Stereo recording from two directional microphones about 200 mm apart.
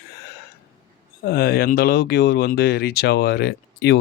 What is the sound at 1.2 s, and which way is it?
Speech, 50° left (ahead or behind).